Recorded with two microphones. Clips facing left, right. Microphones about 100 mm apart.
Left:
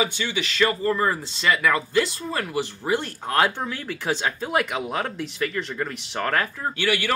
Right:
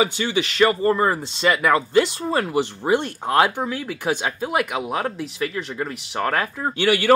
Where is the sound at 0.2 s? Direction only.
35° right (ahead or behind); by 6.3 s 15° right (ahead or behind).